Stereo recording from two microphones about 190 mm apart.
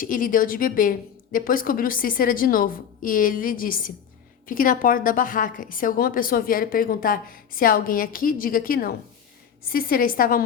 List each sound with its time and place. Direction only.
0.0 s a woman's voice: 45° left (ahead or behind)